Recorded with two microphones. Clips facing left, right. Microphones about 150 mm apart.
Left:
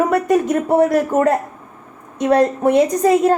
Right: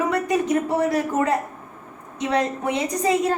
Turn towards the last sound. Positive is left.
turn(degrees=50)  # may be behind; listen again after turning